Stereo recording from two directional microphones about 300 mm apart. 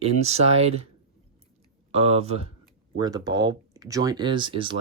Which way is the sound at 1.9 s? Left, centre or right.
Centre.